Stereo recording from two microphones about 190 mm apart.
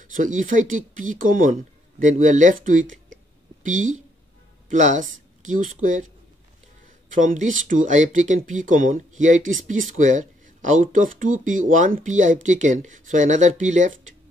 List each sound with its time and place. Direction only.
0.0 s speech: 45° right (ahead or behind)
7.1 s speech: 40° right (ahead or behind)